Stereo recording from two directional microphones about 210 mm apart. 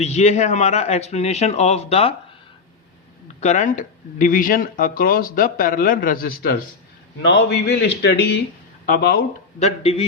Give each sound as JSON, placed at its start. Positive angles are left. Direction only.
{"t": 0.0, "sound": "speech", "side_deg": 30}
{"t": 3.4, "sound": "a man's voice", "side_deg": 35}
{"t": 9.6, "sound": "speech", "side_deg": 30}